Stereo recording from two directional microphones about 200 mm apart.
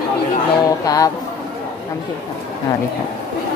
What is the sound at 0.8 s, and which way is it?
Speech, 15° left (ahead or behind).